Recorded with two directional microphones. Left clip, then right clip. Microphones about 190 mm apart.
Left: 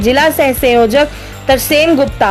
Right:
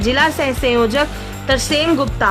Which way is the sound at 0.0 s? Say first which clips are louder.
Left 6 dB; 25° left (ahead or behind).